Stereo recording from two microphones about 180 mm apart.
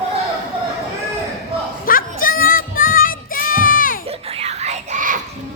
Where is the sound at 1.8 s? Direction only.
50° left (ahead or behind).